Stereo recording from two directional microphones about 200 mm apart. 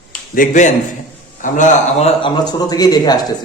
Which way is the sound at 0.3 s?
40° left (ahead or behind).